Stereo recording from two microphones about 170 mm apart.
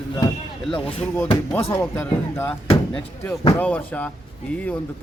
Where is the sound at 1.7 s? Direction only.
10° left (ahead or behind).